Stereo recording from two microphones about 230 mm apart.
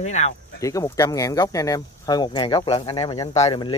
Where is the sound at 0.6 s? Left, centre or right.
Centre.